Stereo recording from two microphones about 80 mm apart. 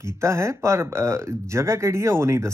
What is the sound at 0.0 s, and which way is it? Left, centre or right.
Speech, right.